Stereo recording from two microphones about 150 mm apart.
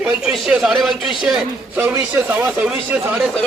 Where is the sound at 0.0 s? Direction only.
5° right (ahead or behind).